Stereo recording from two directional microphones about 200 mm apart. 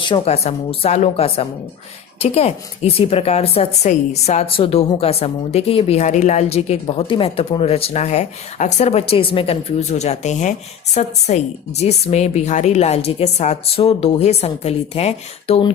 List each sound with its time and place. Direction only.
0.0 s a woman's voice: 25° left (ahead or behind)